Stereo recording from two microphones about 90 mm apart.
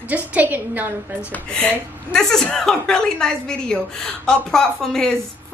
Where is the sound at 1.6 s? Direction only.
10° left (ahead or behind).